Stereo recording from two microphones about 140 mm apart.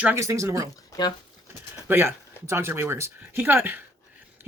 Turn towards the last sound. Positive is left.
turn(degrees=-15)  # may be behind; listen again after turning